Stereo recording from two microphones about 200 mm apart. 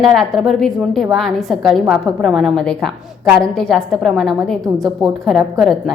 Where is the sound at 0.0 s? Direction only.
Centre (ahead or behind).